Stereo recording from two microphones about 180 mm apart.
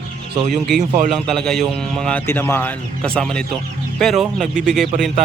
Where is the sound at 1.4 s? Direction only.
5° left (ahead or behind).